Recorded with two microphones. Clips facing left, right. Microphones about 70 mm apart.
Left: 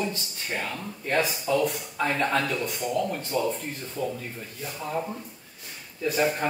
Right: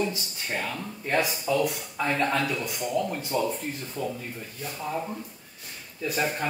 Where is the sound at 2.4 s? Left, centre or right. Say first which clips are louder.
Left 1 dB; centre.